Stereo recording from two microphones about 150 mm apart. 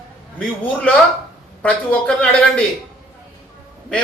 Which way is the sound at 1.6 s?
10° left (ahead or behind).